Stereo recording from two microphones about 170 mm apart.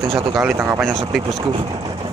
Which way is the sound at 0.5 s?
15° right (ahead or behind).